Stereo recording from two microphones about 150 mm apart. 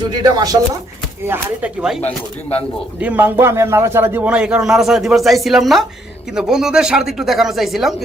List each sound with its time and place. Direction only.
0.1 s speech: 30° right (ahead or behind)
1.3 s a man's voice: 5° right (ahead or behind)
2.0 s speech: 10° left (ahead or behind)
3.0 s a man's voice: 10° right (ahead or behind)